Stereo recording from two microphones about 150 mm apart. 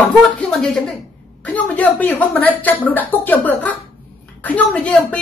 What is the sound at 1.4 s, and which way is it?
A woman's voice, 10° left (ahead or behind).